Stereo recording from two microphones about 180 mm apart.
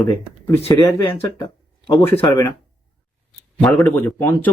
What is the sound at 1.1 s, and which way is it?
Speech, 25° left (ahead or behind).